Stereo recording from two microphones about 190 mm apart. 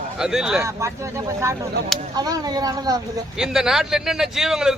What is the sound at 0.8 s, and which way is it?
Speech, 15° right (ahead or behind).